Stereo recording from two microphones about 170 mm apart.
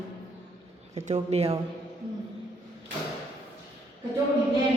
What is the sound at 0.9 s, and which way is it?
Speech, 40° right (ahead or behind).